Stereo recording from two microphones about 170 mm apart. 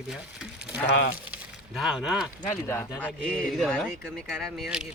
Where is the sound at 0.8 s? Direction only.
65° left (ahead or behind).